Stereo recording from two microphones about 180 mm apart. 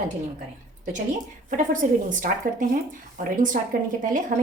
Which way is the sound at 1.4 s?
45° right (ahead or behind).